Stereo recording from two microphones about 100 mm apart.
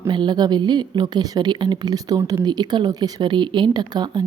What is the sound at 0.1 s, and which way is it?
A woman's voice, 50° right (ahead or behind).